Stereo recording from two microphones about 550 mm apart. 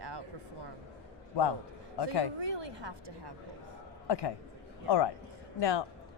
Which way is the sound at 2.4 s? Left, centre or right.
Right.